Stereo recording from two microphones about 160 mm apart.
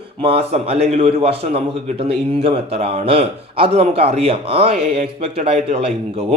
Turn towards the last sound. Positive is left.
turn(degrees=-40)  # may be behind; listen again after turning